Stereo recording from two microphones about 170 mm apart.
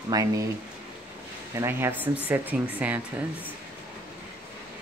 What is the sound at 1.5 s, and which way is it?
Speech, 15° right (ahead or behind).